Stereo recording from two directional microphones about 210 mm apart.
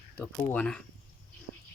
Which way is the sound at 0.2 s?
5° left (ahead or behind).